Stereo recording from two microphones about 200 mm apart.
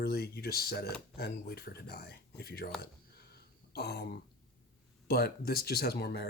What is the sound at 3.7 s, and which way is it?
Speech, 55° left (ahead or behind).